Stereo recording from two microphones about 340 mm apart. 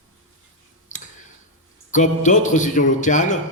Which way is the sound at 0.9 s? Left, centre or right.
Left.